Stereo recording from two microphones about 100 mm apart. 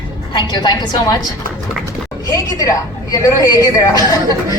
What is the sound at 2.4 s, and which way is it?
A woman's voice, 35° left (ahead or behind).